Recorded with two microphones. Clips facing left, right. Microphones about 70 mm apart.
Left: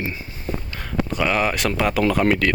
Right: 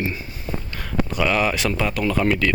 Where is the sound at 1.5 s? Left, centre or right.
Left.